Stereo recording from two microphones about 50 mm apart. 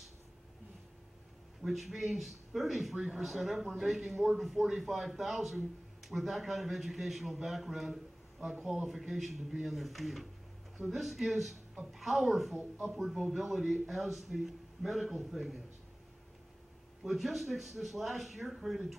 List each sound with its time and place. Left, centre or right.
1.6 s a man's voice: centre
17.0 s a man's voice: centre